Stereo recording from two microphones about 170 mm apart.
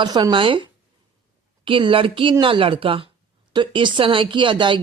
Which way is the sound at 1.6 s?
30° right (ahead or behind).